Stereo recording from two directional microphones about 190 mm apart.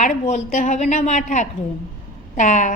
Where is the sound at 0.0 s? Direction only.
40° left (ahead or behind).